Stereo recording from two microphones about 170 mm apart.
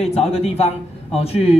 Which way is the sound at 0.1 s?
40° left (ahead or behind).